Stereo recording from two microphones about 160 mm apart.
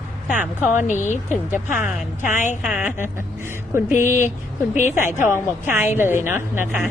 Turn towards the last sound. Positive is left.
turn(degrees=-15)  # may be behind; listen again after turning